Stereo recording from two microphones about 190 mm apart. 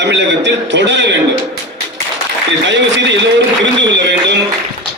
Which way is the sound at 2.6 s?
70° right (ahead or behind).